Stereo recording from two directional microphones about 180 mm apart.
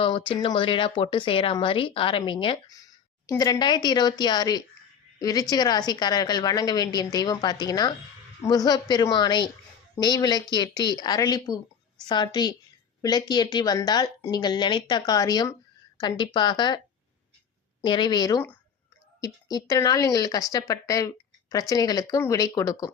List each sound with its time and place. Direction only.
0.0 s speech: 25° left (ahead or behind)
17.8 s speech: 25° left (ahead or behind)